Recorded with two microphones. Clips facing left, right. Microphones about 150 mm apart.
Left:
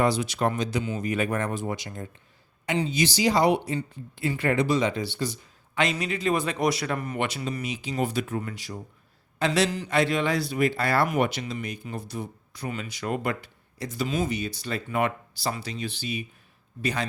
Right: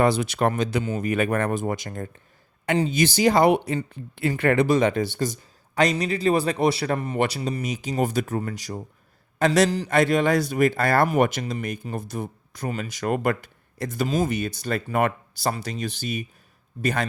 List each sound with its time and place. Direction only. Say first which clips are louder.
0.0 s speech: right 3 dB; 55° right (ahead or behind); by 9.9 s 35° right (ahead or behind)
9.9 s speech: right 4 dB; 50° right (ahead or behind)